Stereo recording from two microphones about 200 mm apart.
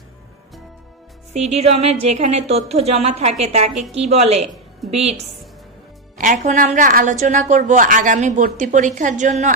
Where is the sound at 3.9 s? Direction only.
30° right (ahead or behind).